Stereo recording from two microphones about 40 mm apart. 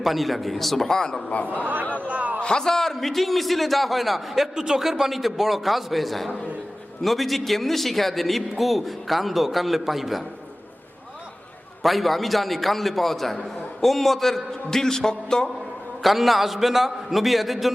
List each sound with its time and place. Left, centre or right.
0.0 s a man's voice: centre
1.6 s a man's voice: right
2.4 s a man's voice: centre
4.5 s a man's voice: centre
11.8 s a man's voice: centre
16.0 s a man's voice: centre